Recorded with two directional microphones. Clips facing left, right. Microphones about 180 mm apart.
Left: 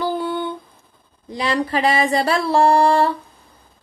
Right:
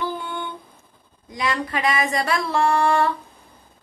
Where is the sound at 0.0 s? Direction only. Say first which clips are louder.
Left 6 dB; 35° left (ahead or behind).